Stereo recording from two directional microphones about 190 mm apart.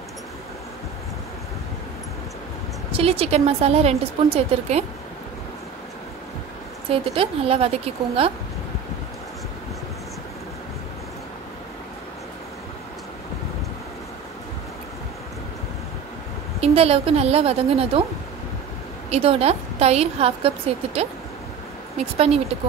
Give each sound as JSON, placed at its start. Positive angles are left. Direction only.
{"t": 2.9, "sound": "a woman's voice", "side_deg": -30}
{"t": 6.9, "sound": "a woman's voice", "side_deg": -30}
{"t": 16.6, "sound": "a woman's voice", "side_deg": -30}
{"t": 19.0, "sound": "a woman's voice", "side_deg": -30}
{"t": 22.1, "sound": "a woman's voice", "side_deg": -30}